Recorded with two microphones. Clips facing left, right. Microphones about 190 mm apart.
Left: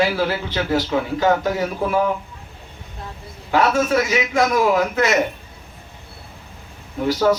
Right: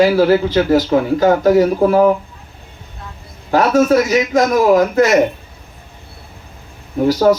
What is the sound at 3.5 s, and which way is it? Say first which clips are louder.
Speech: right 6 dB; 40° right (ahead or behind).